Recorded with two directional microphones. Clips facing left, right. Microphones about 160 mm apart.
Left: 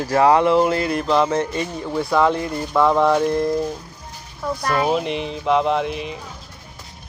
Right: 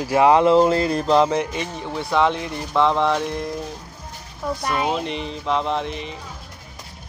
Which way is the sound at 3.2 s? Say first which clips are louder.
Left 7 dB; 50° left (ahead or behind).